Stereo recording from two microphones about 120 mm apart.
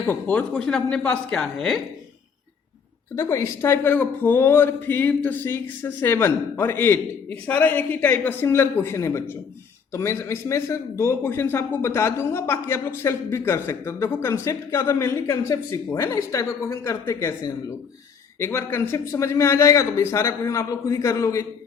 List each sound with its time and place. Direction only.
0.0 s a woman's voice: 15° left (ahead or behind)
3.2 s a woman's voice: 25° left (ahead or behind)